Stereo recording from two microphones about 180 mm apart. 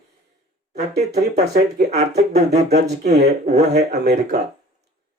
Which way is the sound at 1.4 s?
65° right (ahead or behind).